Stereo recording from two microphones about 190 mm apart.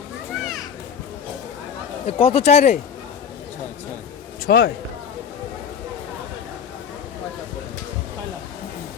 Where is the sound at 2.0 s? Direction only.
30° left (ahead or behind).